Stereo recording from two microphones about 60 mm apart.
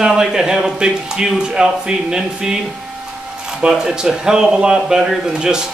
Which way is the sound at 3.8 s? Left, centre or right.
Centre.